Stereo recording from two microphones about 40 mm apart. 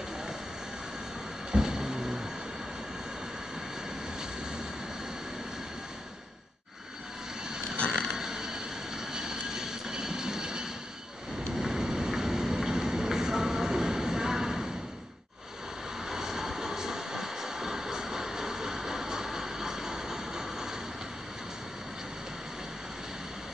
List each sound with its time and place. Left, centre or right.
1.5 s vehicle: centre
7.9 s vehicle: centre
11.5 s a sound: centre
16.1 s vehicle: centre